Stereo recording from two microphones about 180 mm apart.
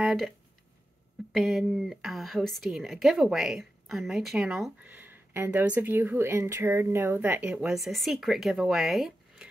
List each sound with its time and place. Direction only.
0.0 s speech: 5° right (ahead or behind)
1.3 s a woman's voice: centre (ahead or behind)